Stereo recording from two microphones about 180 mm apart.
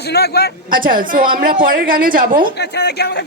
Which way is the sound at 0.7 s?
50° right (ahead or behind).